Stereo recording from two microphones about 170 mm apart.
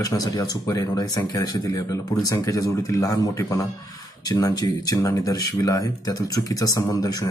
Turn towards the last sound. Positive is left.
turn(degrees=25)  # may be behind; listen again after turning